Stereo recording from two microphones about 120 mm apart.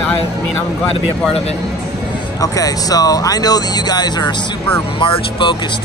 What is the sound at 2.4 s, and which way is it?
Speech, 30° left (ahead or behind).